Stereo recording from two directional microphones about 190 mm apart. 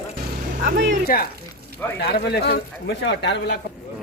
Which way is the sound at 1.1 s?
50° left (ahead or behind).